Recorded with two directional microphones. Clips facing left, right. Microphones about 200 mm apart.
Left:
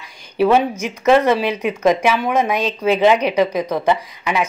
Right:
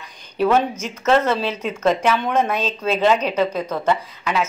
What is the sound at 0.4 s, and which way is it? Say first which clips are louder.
A woman's voice: left 3 dB; 10° left (ahead or behind).